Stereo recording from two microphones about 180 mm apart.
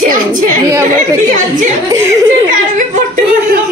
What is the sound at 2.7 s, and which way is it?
Speech, 45° right (ahead or behind).